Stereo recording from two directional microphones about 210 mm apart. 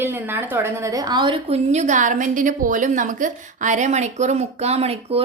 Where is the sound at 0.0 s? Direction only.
10° right (ahead or behind).